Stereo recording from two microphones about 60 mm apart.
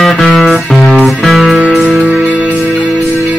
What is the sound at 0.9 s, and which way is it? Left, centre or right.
Music, centre.